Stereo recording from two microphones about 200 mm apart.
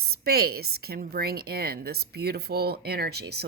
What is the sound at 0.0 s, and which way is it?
A woman's voice, 50° right (ahead or behind).